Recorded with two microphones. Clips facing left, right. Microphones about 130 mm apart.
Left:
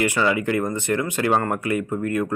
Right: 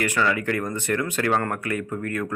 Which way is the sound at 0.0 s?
15° left (ahead or behind).